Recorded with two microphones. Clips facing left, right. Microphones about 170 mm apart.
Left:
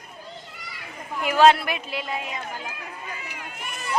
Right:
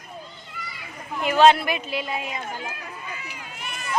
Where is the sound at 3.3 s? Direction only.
60° left (ahead or behind).